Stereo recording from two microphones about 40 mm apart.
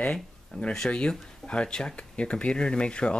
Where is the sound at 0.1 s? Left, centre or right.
Left.